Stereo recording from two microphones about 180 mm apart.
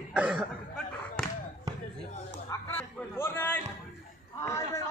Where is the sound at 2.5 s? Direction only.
15° left (ahead or behind).